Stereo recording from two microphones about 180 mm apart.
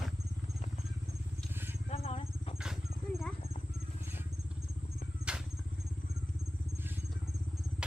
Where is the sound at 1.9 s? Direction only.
35° left (ahead or behind).